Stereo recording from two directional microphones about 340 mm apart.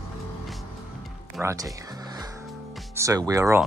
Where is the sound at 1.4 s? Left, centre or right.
Centre.